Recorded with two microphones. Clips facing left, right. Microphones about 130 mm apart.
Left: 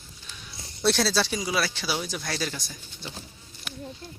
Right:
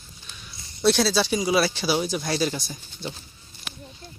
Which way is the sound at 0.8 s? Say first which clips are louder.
Right 4 dB; centre (ahead or behind).